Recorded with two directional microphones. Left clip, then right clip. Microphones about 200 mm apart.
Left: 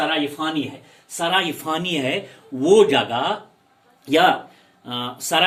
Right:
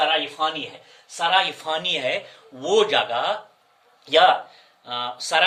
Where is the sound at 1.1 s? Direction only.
20° right (ahead or behind).